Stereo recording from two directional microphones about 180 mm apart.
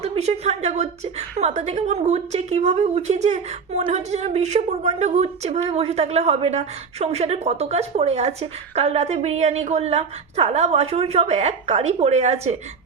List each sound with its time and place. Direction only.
0.0 s a woman's voice: 35° right (ahead or behind)